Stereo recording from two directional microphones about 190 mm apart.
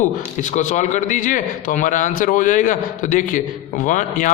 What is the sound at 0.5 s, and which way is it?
A man's voice, 40° left (ahead or behind).